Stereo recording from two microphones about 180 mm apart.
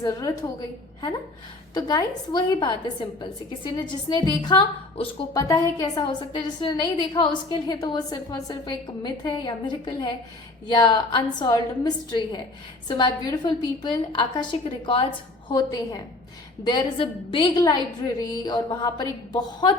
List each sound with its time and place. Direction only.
0.0 s a woman's voice: 20° left (ahead or behind)
1.7 s a woman's voice: 20° left (ahead or behind)